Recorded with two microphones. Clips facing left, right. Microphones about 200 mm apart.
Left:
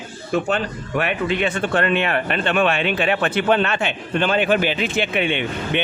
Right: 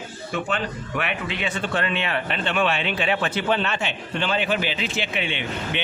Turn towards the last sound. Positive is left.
turn(degrees=55)  # may be behind; listen again after turning